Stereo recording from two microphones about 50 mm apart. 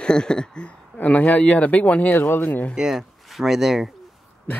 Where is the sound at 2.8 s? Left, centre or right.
Centre.